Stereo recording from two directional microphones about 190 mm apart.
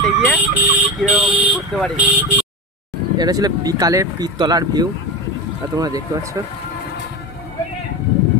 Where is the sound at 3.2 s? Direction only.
20° right (ahead or behind).